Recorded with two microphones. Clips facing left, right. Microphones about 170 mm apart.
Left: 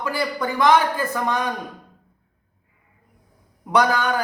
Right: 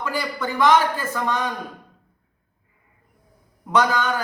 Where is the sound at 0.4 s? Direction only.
15° left (ahead or behind).